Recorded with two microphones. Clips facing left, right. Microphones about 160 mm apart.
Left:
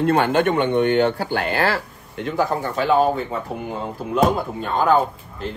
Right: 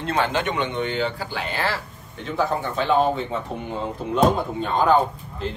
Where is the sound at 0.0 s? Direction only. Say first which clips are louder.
Left 6 dB; 55° left (ahead or behind).